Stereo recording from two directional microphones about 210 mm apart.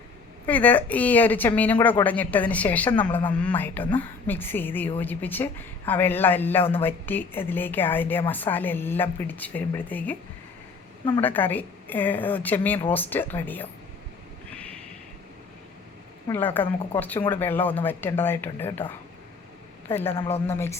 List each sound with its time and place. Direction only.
0.4 s speech: 10° left (ahead or behind)
11.2 s speech: 10° left (ahead or behind)
16.3 s speech: 10° left (ahead or behind)
19.9 s speech: 10° left (ahead or behind)
20.1 s speech: 30° left (ahead or behind)
20.5 s speech: 10° left (ahead or behind)